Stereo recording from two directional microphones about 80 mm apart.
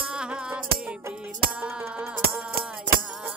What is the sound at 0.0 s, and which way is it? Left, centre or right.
Music, centre.